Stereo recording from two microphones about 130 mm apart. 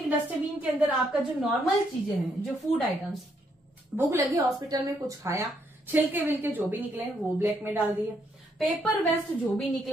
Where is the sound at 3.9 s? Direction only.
15° right (ahead or behind).